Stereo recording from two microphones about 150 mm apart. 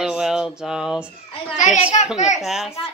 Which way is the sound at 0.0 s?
5° right (ahead or behind).